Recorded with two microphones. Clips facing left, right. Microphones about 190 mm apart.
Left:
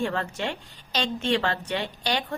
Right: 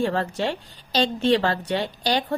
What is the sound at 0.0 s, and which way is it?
A woman's voice, 35° right (ahead or behind).